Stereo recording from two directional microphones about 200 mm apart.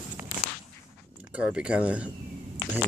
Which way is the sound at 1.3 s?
5° right (ahead or behind).